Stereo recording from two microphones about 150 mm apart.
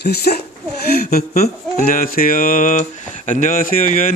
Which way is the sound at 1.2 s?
45° left (ahead or behind).